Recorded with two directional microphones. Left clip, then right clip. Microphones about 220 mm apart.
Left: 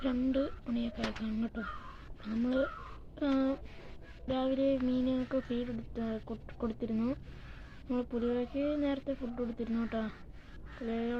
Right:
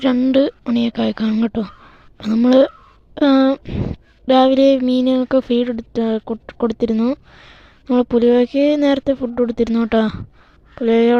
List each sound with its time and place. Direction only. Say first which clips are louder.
0.0 s speech: right 18 dB; 50° right (ahead or behind)